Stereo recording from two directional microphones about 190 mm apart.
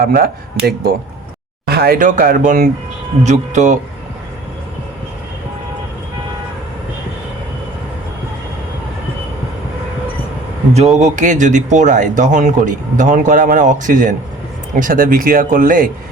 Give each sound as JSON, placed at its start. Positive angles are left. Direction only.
{"t": 0.0, "sound": "speech", "side_deg": -50}
{"t": 10.8, "sound": "speech", "side_deg": -35}